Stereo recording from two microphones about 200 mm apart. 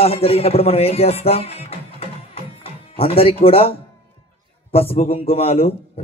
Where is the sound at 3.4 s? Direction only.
30° left (ahead or behind).